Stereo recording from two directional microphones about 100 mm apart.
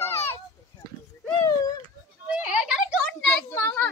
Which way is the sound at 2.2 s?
15° right (ahead or behind).